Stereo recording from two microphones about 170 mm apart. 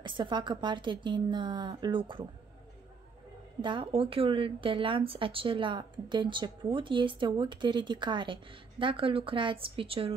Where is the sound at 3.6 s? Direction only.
30° right (ahead or behind).